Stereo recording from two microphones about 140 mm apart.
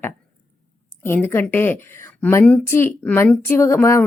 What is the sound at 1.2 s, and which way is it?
A woman's voice, 15° left (ahead or behind).